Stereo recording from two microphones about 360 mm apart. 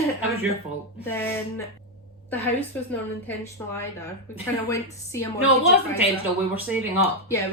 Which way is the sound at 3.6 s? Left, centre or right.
Centre.